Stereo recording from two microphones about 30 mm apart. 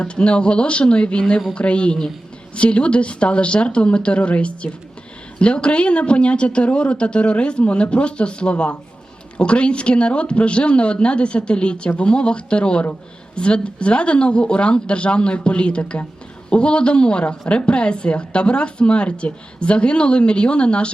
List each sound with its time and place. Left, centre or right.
0.0 s a woman's voice: left